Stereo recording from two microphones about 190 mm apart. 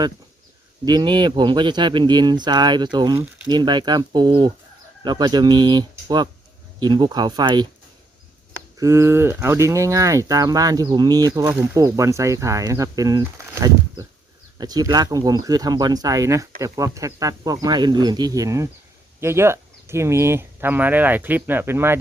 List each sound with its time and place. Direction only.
0.9 s speech: 20° right (ahead or behind)
8.8 s speech: 15° right (ahead or behind)